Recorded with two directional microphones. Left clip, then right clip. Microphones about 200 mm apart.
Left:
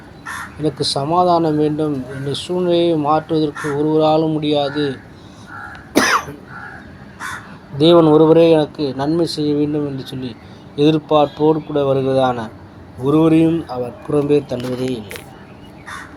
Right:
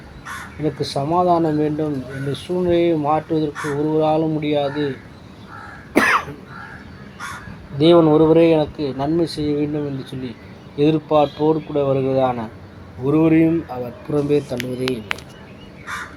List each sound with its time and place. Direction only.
0.6 s speech: 20° left (ahead or behind)
5.9 s cough: 30° left (ahead or behind)
7.8 s speech: 25° left (ahead or behind)